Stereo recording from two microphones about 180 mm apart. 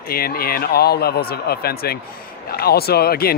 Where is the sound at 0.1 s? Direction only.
55° left (ahead or behind).